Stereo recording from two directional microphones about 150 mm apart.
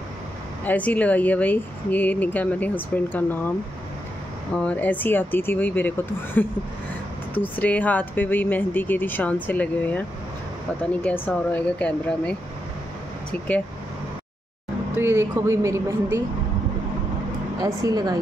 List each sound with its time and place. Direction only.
0.7 s speech: 10° left (ahead or behind)
4.6 s speech: 10° left (ahead or behind)
15.0 s speech: 15° right (ahead or behind)
17.6 s a woman's voice: 25° right (ahead or behind)